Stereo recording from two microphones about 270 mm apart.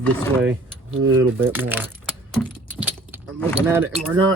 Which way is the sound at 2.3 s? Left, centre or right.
Centre.